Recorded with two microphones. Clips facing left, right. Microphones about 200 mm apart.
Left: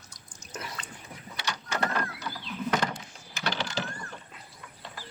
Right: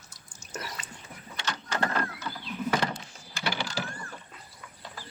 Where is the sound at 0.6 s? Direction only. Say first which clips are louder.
Left 1 dB; 5° right (ahead or behind).